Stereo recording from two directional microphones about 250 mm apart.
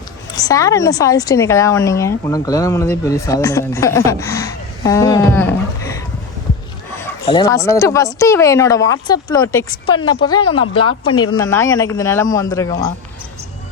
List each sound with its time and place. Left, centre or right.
0.3 s a woman's voice: centre
7.3 s a woman's voice: centre